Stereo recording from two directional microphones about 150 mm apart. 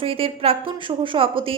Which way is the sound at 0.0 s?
40° right (ahead or behind).